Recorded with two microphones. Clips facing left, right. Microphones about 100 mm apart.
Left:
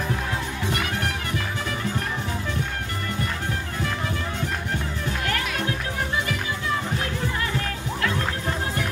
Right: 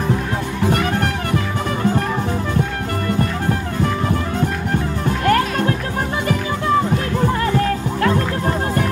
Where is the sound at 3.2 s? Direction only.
45° right (ahead or behind).